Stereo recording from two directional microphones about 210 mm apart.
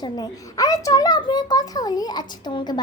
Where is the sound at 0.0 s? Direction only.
15° left (ahead or behind).